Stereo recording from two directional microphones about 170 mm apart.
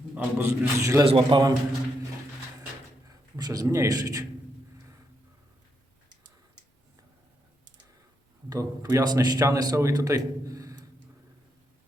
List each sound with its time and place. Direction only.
0.1 s a man's voice: 10° right (ahead or behind)
1.0 s a man's voice: 30° right (ahead or behind)
3.1 s a man's voice: 20° right (ahead or behind)
8.4 s speech: 20° right (ahead or behind)